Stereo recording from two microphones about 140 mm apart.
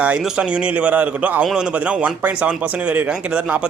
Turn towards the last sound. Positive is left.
turn(degrees=-10)  # may be behind; listen again after turning